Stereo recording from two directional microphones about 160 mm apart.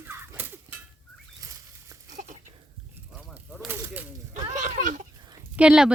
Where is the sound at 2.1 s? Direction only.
55° right (ahead or behind).